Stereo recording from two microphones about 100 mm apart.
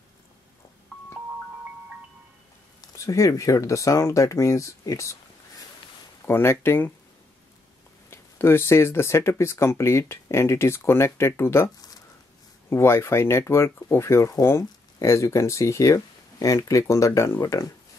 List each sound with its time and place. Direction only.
2.9 s speech: 35° left (ahead or behind)
6.2 s speech: 25° left (ahead or behind)
8.1 s speech: 25° left (ahead or behind)